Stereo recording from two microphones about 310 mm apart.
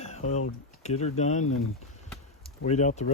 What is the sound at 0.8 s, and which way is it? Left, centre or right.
Speech, left.